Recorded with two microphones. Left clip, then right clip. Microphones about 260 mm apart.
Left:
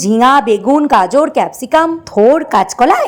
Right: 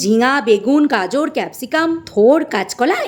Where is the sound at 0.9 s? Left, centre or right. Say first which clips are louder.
Left 7 dB; centre.